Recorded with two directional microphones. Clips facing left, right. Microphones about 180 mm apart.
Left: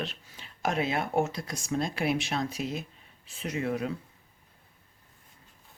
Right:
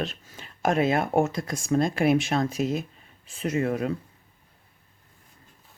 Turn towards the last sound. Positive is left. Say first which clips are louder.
# right 5 dB
turn(degrees=-50)  # may be behind; listen again after turning